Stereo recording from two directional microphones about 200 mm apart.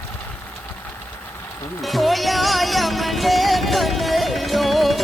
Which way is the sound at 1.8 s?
Centre (ahead or behind).